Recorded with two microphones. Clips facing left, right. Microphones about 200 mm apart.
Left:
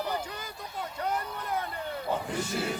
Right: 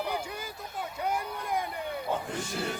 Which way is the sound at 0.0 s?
10° right (ahead or behind).